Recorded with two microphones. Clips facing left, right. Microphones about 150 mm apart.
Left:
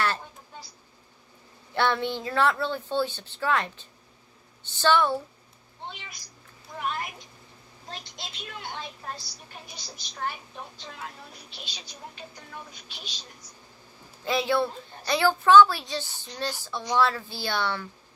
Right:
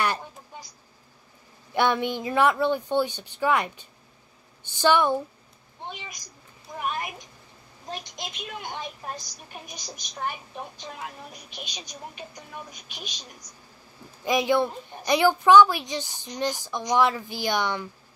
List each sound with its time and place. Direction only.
0.0 s a sound: 15° right (ahead or behind)
1.7 s a woman's voice: 15° right (ahead or behind)
7.9 s a woman's voice: 15° right (ahead or behind)
11.5 s a woman's voice: 20° right (ahead or behind)
14.2 s a woman's voice: 15° right (ahead or behind)